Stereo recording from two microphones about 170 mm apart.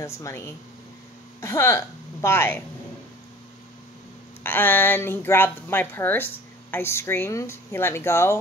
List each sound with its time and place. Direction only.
0.0 s a woman's voice: 15° left (ahead or behind)
4.4 s speech: 10° left (ahead or behind)